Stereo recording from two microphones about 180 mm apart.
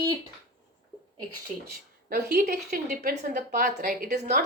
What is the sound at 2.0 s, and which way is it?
Speech, 55° right (ahead or behind).